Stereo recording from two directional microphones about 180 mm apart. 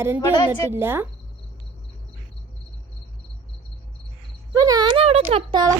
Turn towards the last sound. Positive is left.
turn(degrees=-25)  # may be behind; listen again after turning